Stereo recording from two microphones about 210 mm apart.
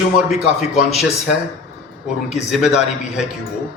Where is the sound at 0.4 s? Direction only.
30° left (ahead or behind).